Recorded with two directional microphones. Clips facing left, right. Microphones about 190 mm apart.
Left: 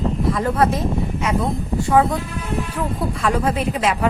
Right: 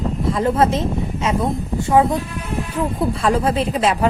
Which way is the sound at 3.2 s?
30° right (ahead or behind).